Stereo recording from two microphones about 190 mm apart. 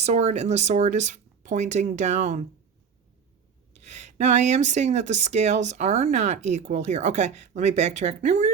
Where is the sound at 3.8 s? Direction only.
35° right (ahead or behind).